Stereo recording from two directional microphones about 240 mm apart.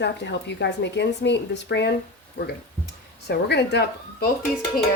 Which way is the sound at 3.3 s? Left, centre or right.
Left.